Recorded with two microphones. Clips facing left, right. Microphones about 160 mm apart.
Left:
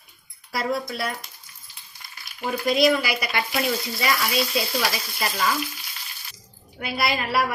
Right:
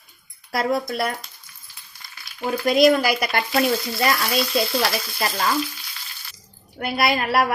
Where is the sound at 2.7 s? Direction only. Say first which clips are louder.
Right 5 dB; 45° right (ahead or behind).